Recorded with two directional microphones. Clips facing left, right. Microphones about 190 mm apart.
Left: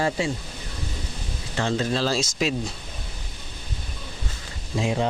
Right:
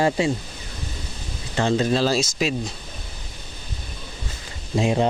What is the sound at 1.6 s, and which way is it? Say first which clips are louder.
Speech: right 4 dB; 15° right (ahead or behind).